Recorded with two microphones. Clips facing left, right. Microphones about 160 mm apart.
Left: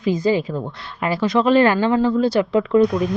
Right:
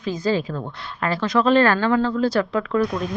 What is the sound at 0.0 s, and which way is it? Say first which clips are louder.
Speech: left 4 dB; 15° left (ahead or behind).